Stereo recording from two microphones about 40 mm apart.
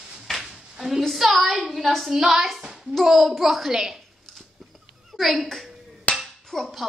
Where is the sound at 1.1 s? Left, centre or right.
Centre.